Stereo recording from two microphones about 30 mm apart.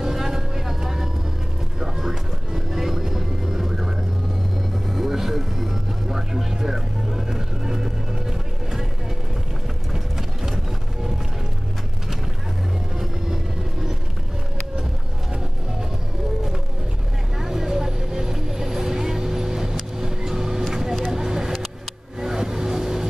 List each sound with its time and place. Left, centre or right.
0.0 s vehicle: centre
2.0 s music: centre
4.8 s vehicle: centre
9.9 s clip-clop: centre
17.4 s vehicle: centre
22.2 s music: centre